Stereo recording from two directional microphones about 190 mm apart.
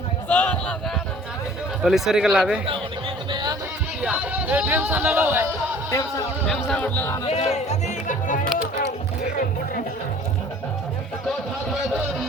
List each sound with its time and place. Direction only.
0.3 s a sound: 10° left (ahead or behind)
1.8 s speech: centre (ahead or behind)
3.3 s music: 20° right (ahead or behind)
4.0 s speech: 5° right (ahead or behind)
5.9 s speech: 15° left (ahead or behind)
6.5 s speech: 5° left (ahead or behind)
7.3 s speech: 35° left (ahead or behind)
11.3 s a sound: centre (ahead or behind)